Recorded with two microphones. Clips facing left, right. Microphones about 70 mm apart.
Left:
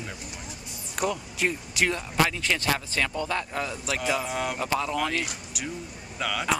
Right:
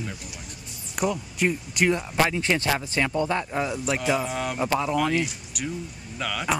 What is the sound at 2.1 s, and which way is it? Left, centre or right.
Speech, right.